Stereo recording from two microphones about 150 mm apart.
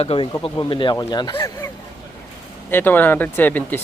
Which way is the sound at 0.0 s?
40° left (ahead or behind).